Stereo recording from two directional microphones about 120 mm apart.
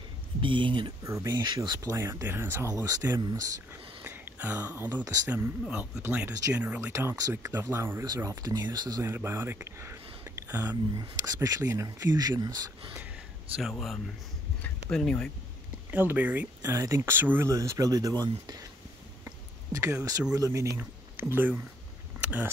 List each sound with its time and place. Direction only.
0.4 s speech: 40° right (ahead or behind)
1.0 s speech: 25° right (ahead or behind)
4.0 s a sound: 15° right (ahead or behind)
5.3 s speech: 15° right (ahead or behind); by 9.1 s 30° right (ahead or behind)
9.1 s speech: 20° right (ahead or behind)
11.0 s speech: 30° right (ahead or behind)
13.6 s speech: centre (ahead or behind)
15.9 s speech: 15° right (ahead or behind); by 18.7 s 35° right (ahead or behind)
19.7 s speech: 25° right (ahead or behind)
21.2 s speech: 15° right (ahead or behind)
22.2 s a sound: 10° right (ahead or behind)